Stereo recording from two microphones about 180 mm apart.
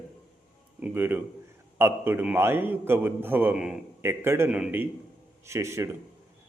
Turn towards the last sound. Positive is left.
turn(degrees=-15)  # may be behind; listen again after turning